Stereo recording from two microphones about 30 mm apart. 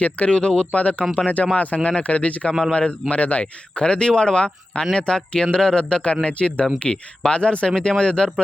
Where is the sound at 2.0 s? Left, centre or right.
Left.